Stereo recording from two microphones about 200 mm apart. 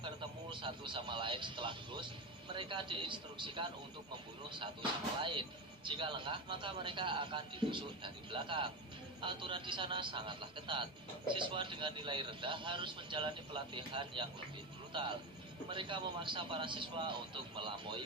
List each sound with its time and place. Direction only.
0.5 s speech: 25° right (ahead or behind)